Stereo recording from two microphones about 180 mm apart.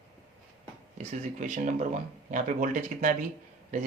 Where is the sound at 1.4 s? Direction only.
45° right (ahead or behind).